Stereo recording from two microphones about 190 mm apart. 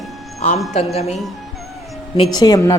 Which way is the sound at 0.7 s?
35° left (ahead or behind).